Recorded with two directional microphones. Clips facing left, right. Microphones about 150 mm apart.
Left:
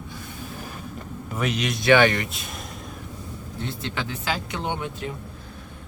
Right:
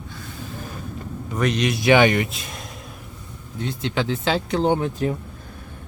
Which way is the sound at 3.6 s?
20° right (ahead or behind).